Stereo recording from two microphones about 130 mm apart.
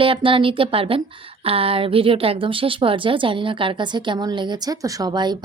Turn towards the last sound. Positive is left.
turn(degrees=-35)  # may be behind; listen again after turning